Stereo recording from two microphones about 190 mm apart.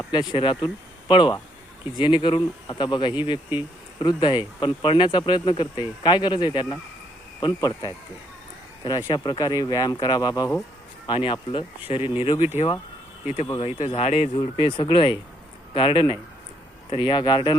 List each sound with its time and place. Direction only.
0.3 s speech: 25° left (ahead or behind)